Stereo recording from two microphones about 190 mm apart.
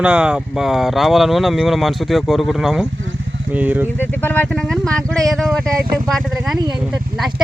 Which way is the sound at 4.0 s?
10° left (ahead or behind).